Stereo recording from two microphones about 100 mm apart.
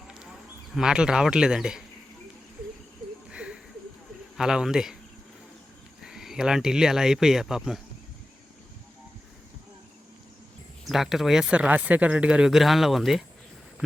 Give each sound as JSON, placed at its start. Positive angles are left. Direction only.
{"t": 0.1, "sound": "a man's voice", "side_deg": -5}
{"t": 3.3, "sound": "a sound", "side_deg": -10}
{"t": 4.4, "sound": "speech", "side_deg": -5}
{"t": 6.0, "sound": "speech", "side_deg": -5}
{"t": 10.8, "sound": "speech", "side_deg": -5}